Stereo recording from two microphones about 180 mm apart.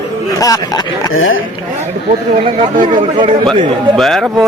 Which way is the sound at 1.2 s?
90° left.